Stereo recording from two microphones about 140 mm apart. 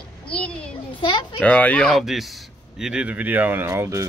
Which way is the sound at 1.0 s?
35° left (ahead or behind).